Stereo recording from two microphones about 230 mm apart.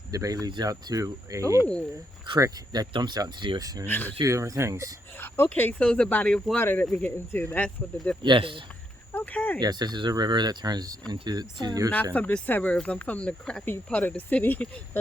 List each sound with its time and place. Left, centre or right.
0.1 s speech: centre
1.5 s speech: centre
2.2 s speech: centre
3.8 s speech: centre
4.2 s speech: centre
5.2 s speech: centre
8.2 s speech: right
9.1 s speech: centre
9.6 s speech: centre
12.1 s speech: centre